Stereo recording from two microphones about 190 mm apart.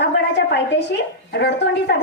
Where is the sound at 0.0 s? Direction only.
60° left (ahead or behind).